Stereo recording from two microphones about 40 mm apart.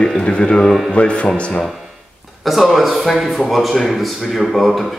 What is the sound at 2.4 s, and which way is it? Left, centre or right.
Speech, centre.